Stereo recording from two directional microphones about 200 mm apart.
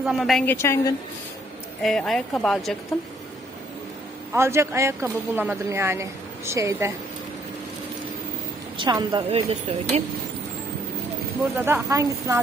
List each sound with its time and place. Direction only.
0.0 s speech: centre (ahead or behind)
0.5 s a woman's voice: 15° left (ahead or behind)
1.8 s speech: centre (ahead or behind)
4.3 s a woman's voice: 15° right (ahead or behind)
8.8 s a woman's voice: 25° right (ahead or behind)
11.5 s a woman's voice: 10° right (ahead or behind)